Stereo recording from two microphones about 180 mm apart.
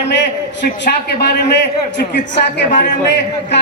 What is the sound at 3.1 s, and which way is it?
Speech, 70° left (ahead or behind).